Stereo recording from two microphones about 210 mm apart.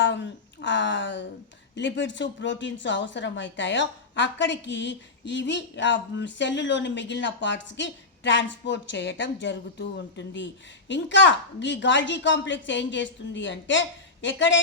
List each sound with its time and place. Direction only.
0.0 s a woman's voice: 55° left (ahead or behind)